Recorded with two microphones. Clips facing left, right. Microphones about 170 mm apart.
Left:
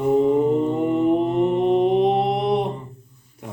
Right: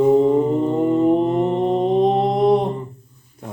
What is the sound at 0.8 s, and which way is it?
Mantra, 35° right (ahead or behind).